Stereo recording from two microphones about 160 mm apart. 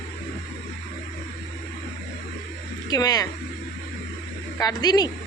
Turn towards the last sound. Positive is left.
turn(degrees=25)  # may be behind; listen again after turning